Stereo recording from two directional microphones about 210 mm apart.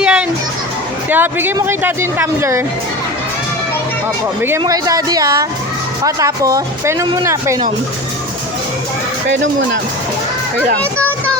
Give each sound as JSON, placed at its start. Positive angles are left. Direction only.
{"t": 0.0, "sound": "children playing", "side_deg": -5}
{"t": 1.1, "sound": "speech", "side_deg": -10}
{"t": 4.4, "sound": "speech", "side_deg": -15}